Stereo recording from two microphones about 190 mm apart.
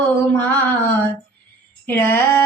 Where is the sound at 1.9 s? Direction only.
10° left (ahead or behind).